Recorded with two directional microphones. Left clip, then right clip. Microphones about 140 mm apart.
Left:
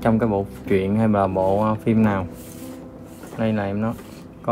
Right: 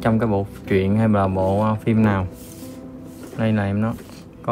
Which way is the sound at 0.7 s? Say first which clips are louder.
Even; 90° right.